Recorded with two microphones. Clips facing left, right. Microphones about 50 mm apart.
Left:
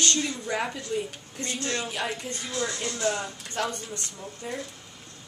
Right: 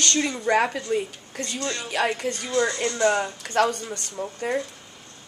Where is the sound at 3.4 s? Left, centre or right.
Right.